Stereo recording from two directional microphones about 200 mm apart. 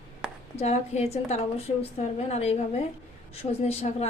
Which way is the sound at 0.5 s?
35° left (ahead or behind).